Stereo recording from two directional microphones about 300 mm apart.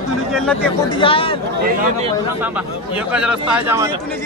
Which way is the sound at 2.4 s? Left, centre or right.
Centre.